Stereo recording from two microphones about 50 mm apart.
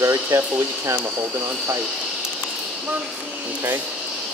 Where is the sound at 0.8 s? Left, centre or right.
Right.